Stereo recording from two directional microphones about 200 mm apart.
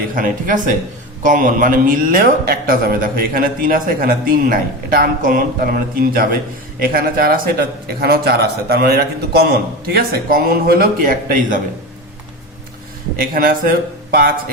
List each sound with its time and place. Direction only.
0.1 s a man's voice: 40° right (ahead or behind)
13.3 s a man's voice: 45° right (ahead or behind)